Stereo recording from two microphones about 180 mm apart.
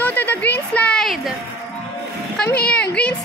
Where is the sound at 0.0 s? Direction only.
10° left (ahead or behind).